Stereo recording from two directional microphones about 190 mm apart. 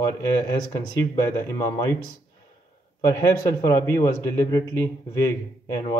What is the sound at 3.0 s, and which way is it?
Speech, 20° left (ahead or behind).